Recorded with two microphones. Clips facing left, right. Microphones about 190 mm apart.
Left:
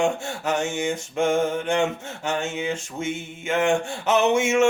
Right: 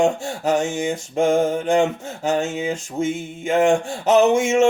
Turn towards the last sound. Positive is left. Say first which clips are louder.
# right 4 dB
turn(degrees=-35)  # may be behind; listen again after turning